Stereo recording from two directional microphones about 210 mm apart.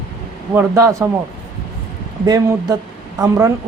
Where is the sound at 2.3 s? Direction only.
20° right (ahead or behind).